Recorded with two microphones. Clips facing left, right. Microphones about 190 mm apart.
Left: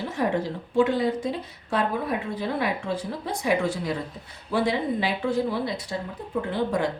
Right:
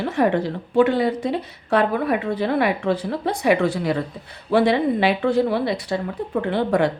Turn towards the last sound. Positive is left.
turn(degrees=-70)  # may be behind; listen again after turning